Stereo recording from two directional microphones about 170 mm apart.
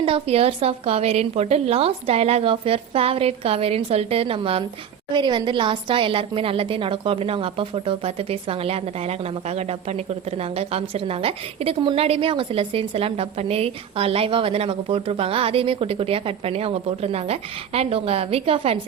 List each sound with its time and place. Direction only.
0.0 s a woman's voice: 35° right (ahead or behind)